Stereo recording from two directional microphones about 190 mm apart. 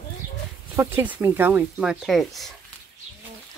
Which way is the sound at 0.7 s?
10° right (ahead or behind).